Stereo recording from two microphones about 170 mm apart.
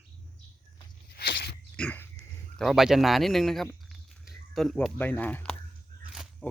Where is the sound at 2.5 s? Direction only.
Centre (ahead or behind).